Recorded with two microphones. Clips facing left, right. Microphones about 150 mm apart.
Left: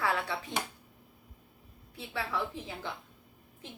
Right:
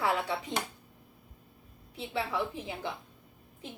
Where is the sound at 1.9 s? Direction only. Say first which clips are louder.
Right 2 dB; 20° right (ahead or behind).